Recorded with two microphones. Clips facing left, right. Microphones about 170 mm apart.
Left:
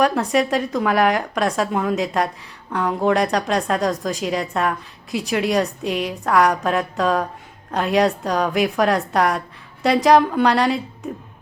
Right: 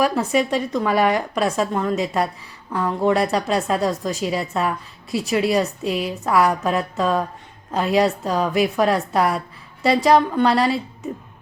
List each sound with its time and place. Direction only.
0.0 s speech: centre (ahead or behind)